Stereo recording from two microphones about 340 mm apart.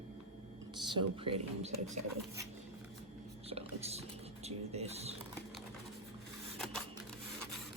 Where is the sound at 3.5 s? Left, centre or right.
Centre.